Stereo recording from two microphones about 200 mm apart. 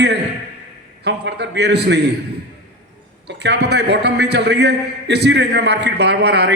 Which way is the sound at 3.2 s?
55° right (ahead or behind).